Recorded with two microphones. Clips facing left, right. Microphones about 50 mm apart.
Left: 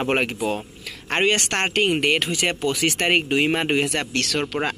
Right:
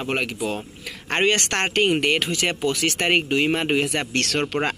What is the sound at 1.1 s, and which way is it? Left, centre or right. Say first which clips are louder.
Speech: even; centre.